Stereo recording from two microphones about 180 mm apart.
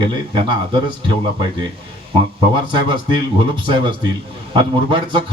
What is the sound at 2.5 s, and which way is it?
A man's voice, 25° right (ahead or behind).